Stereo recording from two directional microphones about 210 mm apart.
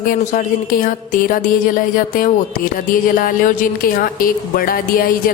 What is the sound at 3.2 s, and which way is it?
Speech, 40° left (ahead or behind).